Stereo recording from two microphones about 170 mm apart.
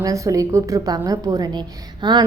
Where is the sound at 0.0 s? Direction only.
20° right (ahead or behind).